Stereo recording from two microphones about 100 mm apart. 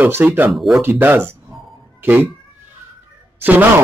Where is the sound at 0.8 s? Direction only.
20° right (ahead or behind).